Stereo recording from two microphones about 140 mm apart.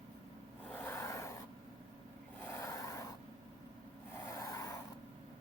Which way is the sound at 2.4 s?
20° left (ahead or behind).